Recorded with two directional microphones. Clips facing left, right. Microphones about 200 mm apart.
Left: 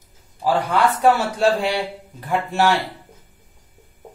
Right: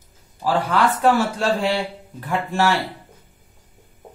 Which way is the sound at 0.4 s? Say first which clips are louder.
Left 1 dB; 15° left (ahead or behind).